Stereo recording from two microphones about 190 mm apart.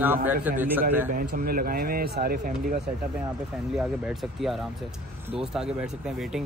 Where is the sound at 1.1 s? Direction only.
50° right (ahead or behind).